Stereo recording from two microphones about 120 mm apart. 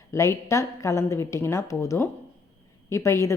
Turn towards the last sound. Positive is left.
turn(degrees=25)  # may be behind; listen again after turning